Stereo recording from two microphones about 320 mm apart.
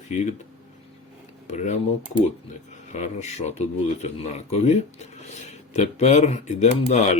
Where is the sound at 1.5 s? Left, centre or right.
Left.